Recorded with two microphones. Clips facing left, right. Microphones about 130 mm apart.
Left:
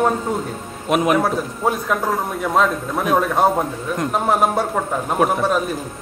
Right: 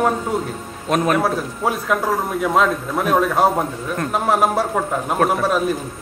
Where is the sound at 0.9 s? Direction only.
10° left (ahead or behind).